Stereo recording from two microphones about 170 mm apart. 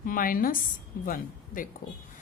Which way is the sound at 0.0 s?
55° left (ahead or behind).